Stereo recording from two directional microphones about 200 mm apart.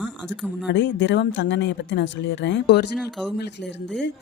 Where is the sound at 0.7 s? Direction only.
65° left (ahead or behind).